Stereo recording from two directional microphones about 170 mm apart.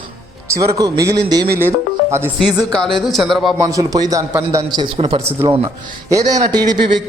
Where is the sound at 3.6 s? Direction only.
20° right (ahead or behind).